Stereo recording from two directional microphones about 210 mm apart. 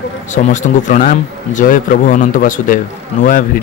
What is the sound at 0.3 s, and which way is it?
Speech, 35° left (ahead or behind).